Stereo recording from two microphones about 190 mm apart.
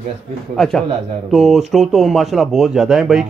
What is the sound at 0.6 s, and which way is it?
A man's voice, centre (ahead or behind).